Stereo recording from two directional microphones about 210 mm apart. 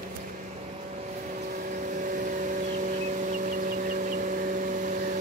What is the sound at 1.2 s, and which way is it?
Vehicle, 40° right (ahead or behind).